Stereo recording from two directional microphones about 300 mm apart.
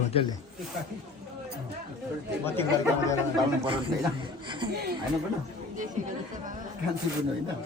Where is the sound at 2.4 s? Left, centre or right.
Centre.